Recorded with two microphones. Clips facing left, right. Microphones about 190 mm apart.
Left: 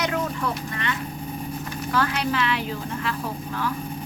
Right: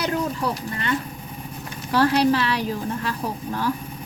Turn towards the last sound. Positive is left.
turn(degrees=-40)  # may be behind; listen again after turning